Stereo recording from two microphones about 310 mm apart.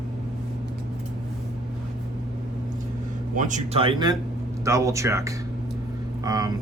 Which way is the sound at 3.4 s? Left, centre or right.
Right.